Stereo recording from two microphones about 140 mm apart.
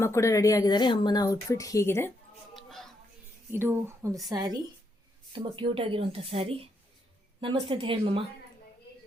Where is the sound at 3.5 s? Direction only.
15° right (ahead or behind); by 8.2 s 40° right (ahead or behind).